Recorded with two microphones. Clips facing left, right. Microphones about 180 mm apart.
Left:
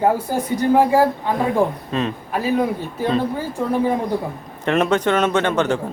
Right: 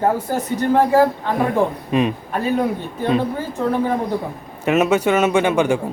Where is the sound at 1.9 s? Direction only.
15° right (ahead or behind).